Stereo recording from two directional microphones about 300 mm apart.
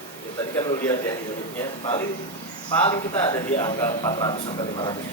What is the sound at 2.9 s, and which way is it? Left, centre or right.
Speech, centre.